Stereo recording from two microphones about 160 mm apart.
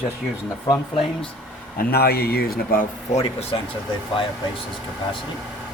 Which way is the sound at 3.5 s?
30° left (ahead or behind).